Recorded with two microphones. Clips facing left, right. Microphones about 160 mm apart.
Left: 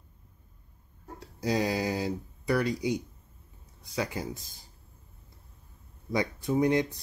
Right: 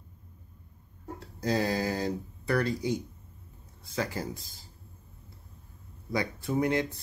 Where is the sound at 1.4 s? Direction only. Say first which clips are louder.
Even; 15° left (ahead or behind).